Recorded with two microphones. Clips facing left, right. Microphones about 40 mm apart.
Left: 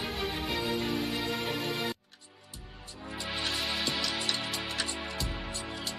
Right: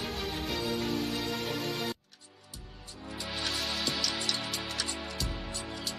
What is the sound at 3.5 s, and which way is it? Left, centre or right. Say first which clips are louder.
Music: left 1 dB; centre.